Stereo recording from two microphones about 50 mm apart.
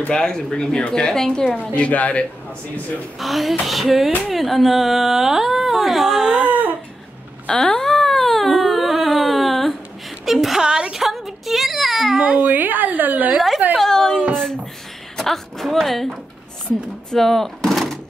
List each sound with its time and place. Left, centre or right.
0.1 s a woman's voice: centre
1.8 s speech: left
3.2 s speech: centre
6.4 s a sound: right
7.4 s a sound: centre
10.6 s baby cry: centre
12.4 s a woman's voice: right
13.7 s a woman's voice: centre